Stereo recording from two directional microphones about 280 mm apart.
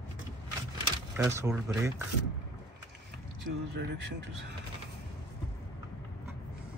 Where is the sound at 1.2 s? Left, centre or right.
Centre.